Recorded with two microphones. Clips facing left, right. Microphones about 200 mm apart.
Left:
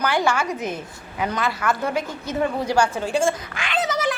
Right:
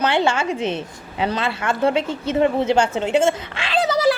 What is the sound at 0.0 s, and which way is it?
A woman's voice, 25° right (ahead or behind).